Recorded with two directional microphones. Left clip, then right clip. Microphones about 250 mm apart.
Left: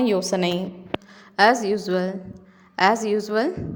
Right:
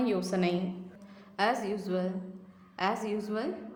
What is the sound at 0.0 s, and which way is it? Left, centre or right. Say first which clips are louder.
A woman's voice: left 9 dB; left.